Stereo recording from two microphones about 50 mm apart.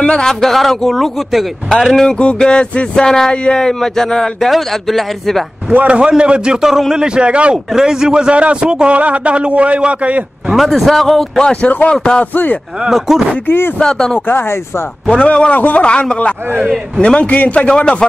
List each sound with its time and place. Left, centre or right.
0.0 s speech: centre
1.9 s a man's voice: centre
2.1 s music: centre
3.1 s a man's voice: centre
5.7 s a man's voice: right
10.5 s speech: centre
11.9 s music: centre
12.8 s speech: centre
13.7 s a man's voice: centre
14.2 s speech: left
15.0 s music: left
15.5 s music: left
16.6 s speech: centre
17.0 s music: left